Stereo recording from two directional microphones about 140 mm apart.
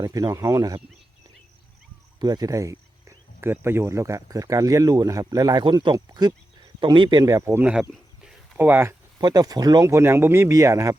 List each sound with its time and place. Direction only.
0.0 s speech: 25° right (ahead or behind)
2.1 s speech: 30° right (ahead or behind)
7.7 s a sound: 5° right (ahead or behind)
9.2 s speech: 30° right (ahead or behind)